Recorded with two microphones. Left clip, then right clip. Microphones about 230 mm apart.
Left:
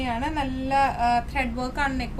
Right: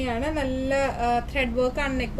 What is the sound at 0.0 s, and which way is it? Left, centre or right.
A woman's voice, left.